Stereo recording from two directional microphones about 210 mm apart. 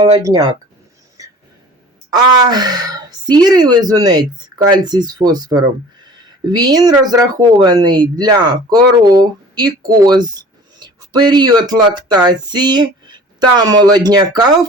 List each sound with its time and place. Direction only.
0.0 s speech: 15° right (ahead or behind)
1.2 s a sound: 15° right (ahead or behind)
2.0 s speech: 20° right (ahead or behind)